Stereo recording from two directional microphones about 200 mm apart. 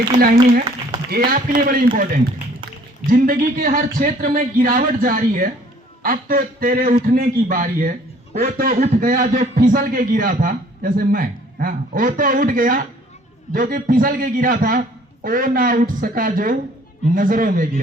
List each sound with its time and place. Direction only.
1.1 s a man's voice: 45° right (ahead or behind)